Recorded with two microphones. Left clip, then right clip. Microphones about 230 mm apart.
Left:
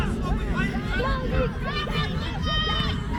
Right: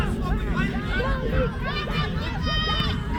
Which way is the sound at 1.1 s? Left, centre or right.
Left.